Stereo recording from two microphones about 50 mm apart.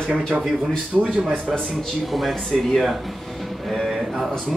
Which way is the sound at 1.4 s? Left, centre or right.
Centre.